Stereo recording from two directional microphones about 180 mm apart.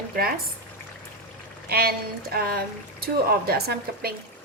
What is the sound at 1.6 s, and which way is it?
Speech, 55° right (ahead or behind).